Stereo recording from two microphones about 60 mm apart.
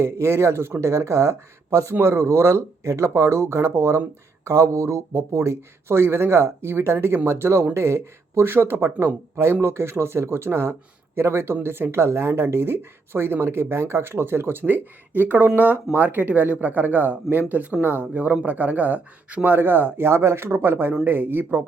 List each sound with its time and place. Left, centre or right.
0.0 s speech: right